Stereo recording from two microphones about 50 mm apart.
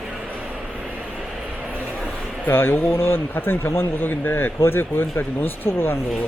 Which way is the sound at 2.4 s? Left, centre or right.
Left.